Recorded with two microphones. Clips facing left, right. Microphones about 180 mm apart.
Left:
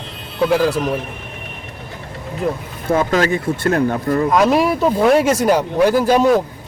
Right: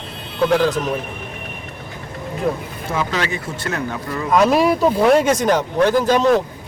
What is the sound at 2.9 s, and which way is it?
Speech, 50° left (ahead or behind).